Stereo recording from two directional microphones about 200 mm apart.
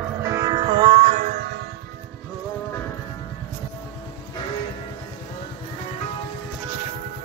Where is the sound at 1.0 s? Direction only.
45° right (ahead or behind).